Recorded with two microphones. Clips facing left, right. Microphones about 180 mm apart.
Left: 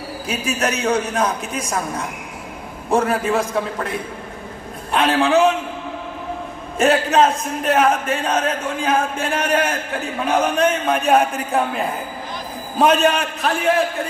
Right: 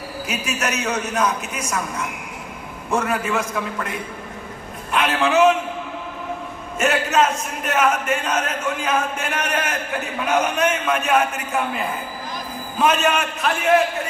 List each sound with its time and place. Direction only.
0.3 s a man's voice: 30° left (ahead or behind)
6.8 s a man's voice: 30° left (ahead or behind)
12.7 s a man's voice: 35° left (ahead or behind)